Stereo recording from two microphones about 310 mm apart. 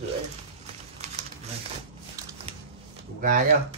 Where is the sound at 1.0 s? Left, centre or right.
Right.